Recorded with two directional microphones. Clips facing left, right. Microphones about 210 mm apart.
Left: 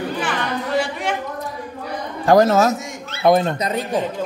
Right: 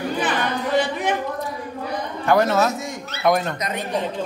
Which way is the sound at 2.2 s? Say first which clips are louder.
Left 4 dB; 35° left (ahead or behind).